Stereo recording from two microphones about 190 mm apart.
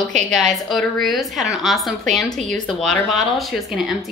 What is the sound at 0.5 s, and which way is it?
Speech, centre (ahead or behind).